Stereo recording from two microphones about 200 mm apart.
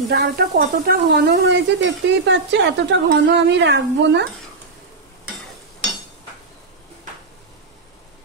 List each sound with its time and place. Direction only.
0.1 s speech: 50° right (ahead or behind)